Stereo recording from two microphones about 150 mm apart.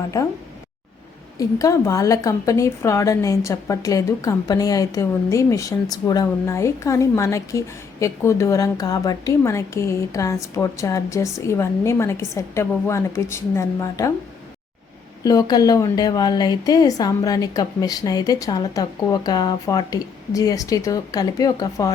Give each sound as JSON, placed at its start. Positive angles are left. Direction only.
{"t": 1.4, "sound": "a woman's voice", "side_deg": 20}
{"t": 15.2, "sound": "a woman's voice", "side_deg": 25}